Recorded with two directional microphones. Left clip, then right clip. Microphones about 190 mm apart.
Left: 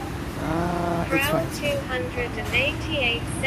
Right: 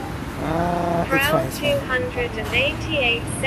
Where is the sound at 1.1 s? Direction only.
15° right (ahead or behind).